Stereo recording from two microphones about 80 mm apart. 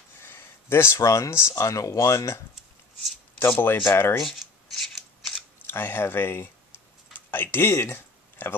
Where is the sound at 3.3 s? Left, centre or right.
Left.